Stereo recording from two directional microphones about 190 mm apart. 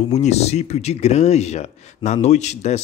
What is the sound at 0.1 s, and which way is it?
Speech, 35° left (ahead or behind).